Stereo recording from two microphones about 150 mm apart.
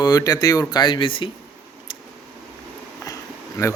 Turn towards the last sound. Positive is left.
turn(degrees=20)  # may be behind; listen again after turning